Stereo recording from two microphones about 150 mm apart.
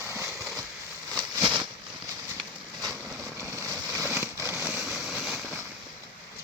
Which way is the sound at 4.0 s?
15° right (ahead or behind).